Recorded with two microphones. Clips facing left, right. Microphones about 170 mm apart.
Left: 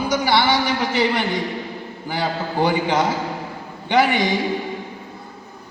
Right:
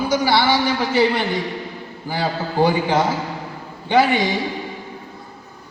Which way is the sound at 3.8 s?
15° left (ahead or behind).